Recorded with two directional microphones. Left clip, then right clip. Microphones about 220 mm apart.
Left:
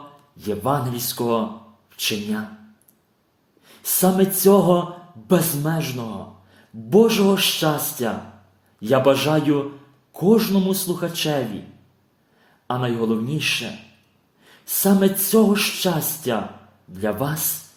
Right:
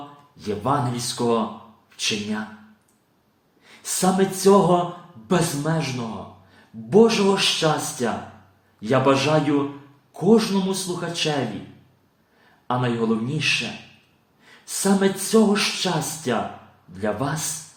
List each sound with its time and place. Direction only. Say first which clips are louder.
0.3 s speech: left 1 dB; 40° left (ahead or behind)
3.7 s speech: left 2 dB; 40° left (ahead or behind)
12.6 s speech: even; 40° left (ahead or behind)